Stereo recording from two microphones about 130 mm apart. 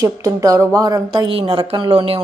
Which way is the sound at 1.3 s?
45° right (ahead or behind).